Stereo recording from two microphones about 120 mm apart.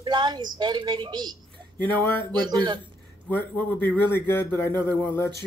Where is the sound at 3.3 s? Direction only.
15° left (ahead or behind).